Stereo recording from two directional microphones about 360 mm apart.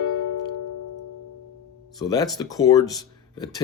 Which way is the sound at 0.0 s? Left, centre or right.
Left.